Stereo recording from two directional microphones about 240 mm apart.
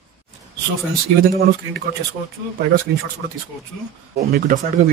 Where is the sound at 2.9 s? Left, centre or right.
Right.